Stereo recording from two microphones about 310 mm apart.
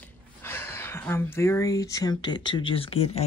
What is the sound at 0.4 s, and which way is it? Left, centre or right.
Speech, centre.